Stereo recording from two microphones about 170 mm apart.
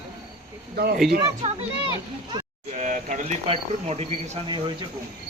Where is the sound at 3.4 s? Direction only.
35° right (ahead or behind).